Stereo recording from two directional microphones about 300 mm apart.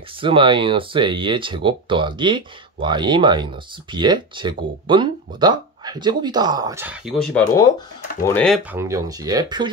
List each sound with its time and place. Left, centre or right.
0.2 s speech: centre
8.7 s speech: centre